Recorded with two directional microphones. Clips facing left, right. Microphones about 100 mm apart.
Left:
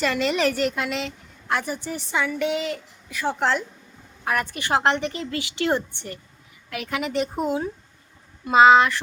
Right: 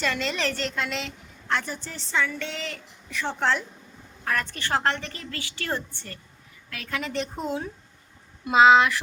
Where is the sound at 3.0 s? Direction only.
5° left (ahead or behind).